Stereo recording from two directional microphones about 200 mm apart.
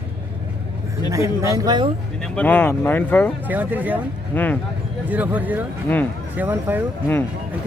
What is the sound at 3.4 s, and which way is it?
Speech, 10° right (ahead or behind).